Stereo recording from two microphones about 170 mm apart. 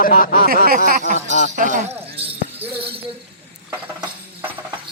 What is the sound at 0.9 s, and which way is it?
Speech, 50° right (ahead or behind).